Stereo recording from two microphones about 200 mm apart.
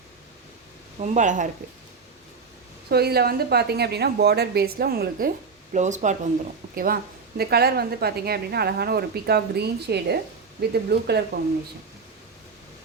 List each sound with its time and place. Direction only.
1.0 s speech: 40° right (ahead or behind)
2.9 s a woman's voice: 50° right (ahead or behind)
5.7 s speech: 35° right (ahead or behind)
6.7 s a woman's voice: 50° right (ahead or behind)